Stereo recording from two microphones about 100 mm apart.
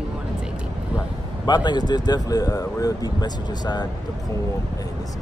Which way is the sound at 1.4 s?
45° left (ahead or behind).